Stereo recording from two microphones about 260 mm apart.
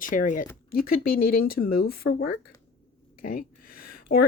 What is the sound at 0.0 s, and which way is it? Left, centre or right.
Speech, left.